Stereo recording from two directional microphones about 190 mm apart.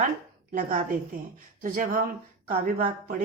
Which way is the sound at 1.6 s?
45° right (ahead or behind).